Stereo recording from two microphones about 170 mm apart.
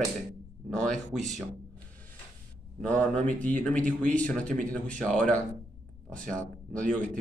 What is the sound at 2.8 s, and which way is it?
Speech, 5° left (ahead or behind).